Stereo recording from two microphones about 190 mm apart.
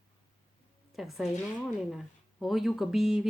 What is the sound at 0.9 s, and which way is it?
Speech, centre (ahead or behind).